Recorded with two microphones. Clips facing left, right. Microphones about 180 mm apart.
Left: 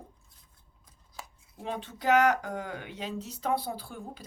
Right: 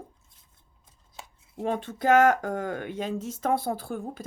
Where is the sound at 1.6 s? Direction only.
50° right (ahead or behind).